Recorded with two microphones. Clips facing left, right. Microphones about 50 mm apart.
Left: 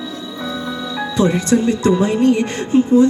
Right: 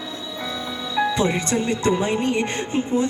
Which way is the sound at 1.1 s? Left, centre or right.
Right.